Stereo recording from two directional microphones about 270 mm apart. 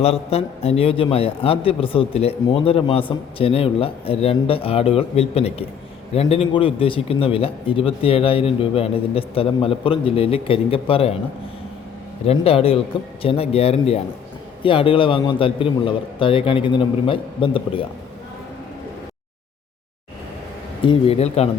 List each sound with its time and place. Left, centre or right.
0.0 s a man's voice: left
12.2 s a man's voice: left
20.8 s a man's voice: centre